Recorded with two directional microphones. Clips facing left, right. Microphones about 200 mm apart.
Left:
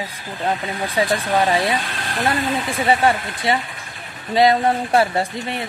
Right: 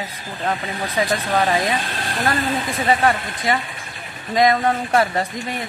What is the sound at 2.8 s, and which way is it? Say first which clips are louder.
Speech: left 1 dB; 25° left (ahead or behind).